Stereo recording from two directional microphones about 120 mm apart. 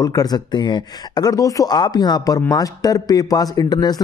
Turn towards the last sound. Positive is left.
turn(degrees=35)  # may be behind; listen again after turning